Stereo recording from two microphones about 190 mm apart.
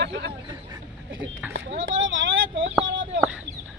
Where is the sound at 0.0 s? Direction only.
60° right (ahead or behind).